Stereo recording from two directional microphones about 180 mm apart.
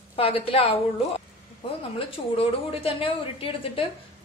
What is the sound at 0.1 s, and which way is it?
Speech, 30° left (ahead or behind).